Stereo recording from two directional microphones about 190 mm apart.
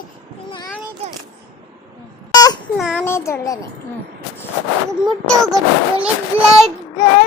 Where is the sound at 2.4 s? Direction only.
20° left (ahead or behind).